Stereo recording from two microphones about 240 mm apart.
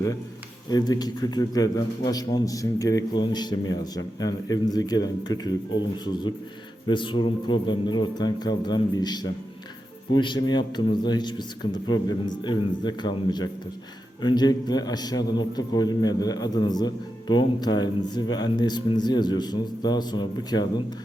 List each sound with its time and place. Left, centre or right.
0.7 s a man's voice: centre